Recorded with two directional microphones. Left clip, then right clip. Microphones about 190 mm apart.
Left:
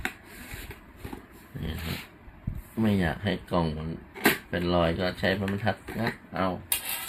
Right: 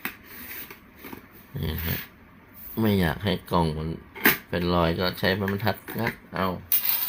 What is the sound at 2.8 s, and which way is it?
Speech, 40° right (ahead or behind).